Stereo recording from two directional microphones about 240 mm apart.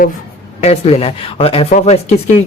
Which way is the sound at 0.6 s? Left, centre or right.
Left.